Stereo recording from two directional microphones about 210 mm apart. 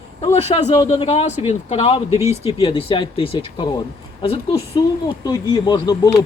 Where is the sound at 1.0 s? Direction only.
30° left (ahead or behind).